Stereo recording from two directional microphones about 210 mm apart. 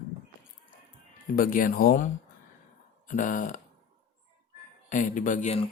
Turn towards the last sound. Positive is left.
turn(degrees=30)  # may be behind; listen again after turning